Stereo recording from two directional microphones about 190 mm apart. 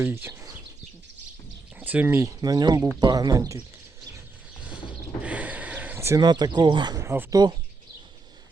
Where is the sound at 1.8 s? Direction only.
10° right (ahead or behind).